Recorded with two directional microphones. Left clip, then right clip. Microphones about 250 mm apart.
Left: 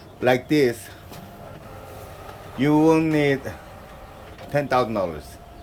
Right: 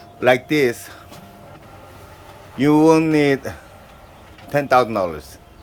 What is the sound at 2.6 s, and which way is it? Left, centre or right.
Speech, right.